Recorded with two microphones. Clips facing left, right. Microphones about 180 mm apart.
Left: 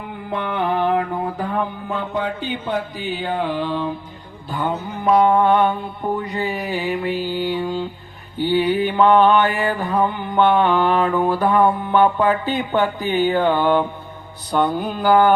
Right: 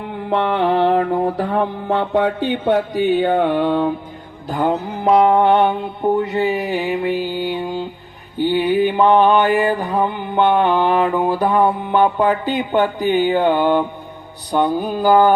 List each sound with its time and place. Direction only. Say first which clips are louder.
0.3 s mantra: right 5 dB; 75° right (ahead or behind); by 3.9 s 55° right (ahead or behind)
5.0 s mantra: right 2 dB; 25° right (ahead or behind)